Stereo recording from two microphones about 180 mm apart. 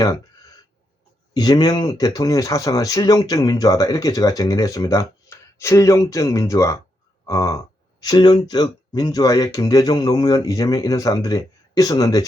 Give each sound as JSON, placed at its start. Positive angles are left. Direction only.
{"t": 1.3, "sound": "speech", "side_deg": 25}